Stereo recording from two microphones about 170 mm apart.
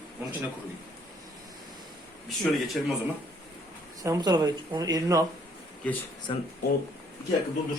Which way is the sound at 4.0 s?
20° right (ahead or behind).